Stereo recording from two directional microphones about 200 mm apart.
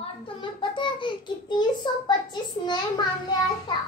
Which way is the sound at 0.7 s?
25° left (ahead or behind).